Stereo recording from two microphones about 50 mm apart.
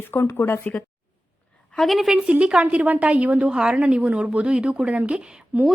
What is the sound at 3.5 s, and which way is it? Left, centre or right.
A woman's voice, centre.